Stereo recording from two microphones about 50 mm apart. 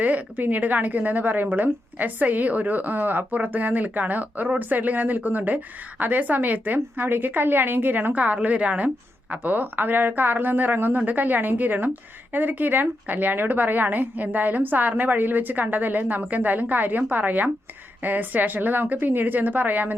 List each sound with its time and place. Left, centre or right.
0.0 s a woman's voice: right